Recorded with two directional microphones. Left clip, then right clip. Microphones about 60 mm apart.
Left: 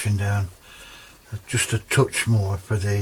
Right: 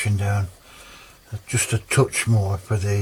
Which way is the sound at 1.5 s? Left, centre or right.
Left.